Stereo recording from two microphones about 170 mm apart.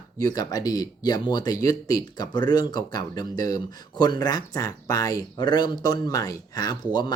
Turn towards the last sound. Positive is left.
turn(degrees=25)  # may be behind; listen again after turning